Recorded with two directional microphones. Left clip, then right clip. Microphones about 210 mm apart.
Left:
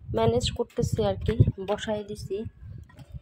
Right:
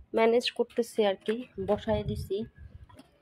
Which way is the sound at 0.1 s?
5° right (ahead or behind).